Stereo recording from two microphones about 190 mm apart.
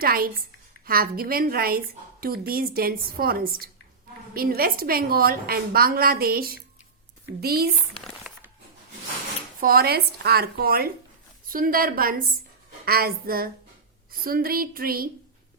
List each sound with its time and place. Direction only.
0.0 s a woman's voice: 50° right (ahead or behind)
7.9 s a sound: 5° left (ahead or behind)
9.6 s a woman's voice: 50° right (ahead or behind)